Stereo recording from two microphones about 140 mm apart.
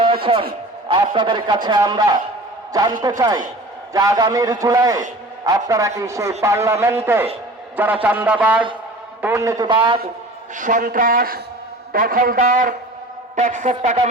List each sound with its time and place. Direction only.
0.0 s a sound: 40° right (ahead or behind)
0.9 s a man's voice: 35° right (ahead or behind)
9.6 s a man's voice: 35° right (ahead or behind)
10.5 s a man's voice: 65° right (ahead or behind)
13.3 s speech: 60° right (ahead or behind)